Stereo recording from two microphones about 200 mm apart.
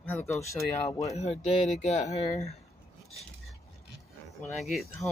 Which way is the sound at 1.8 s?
35° left (ahead or behind).